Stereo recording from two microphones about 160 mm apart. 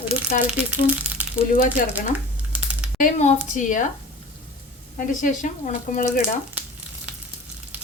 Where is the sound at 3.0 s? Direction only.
50° left (ahead or behind).